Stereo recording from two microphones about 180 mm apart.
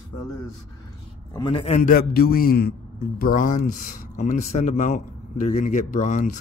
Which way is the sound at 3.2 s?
50° left (ahead or behind).